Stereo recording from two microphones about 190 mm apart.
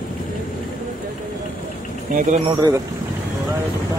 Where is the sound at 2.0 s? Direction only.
45° right (ahead or behind).